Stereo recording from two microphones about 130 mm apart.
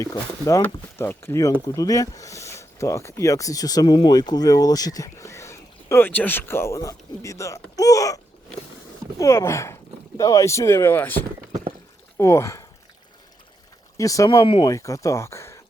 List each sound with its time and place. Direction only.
0.0 s speech: 25° left (ahead or behind)
13.9 s speech: 25° left (ahead or behind)
14.4 s speech: 40° left (ahead or behind)
14.7 s speech: 25° left (ahead or behind)